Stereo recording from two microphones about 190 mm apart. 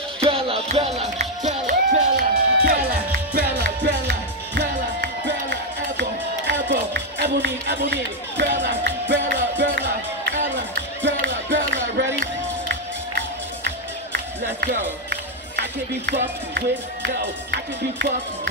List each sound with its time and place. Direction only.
0.2 s music: 30° right (ahead or behind)
1.1 s music: 50° right (ahead or behind)
4.6 s music: 70° right (ahead or behind)
11.1 s music: 65° right (ahead or behind)
16.1 s speech: 70° right (ahead or behind)